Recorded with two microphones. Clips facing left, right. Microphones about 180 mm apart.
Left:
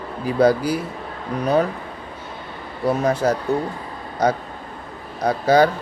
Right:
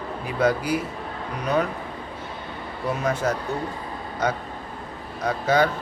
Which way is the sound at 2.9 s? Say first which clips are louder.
Left 6 dB; 35° left (ahead or behind).